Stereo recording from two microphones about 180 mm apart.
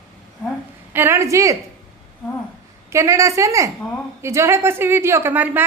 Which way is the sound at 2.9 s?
15° right (ahead or behind).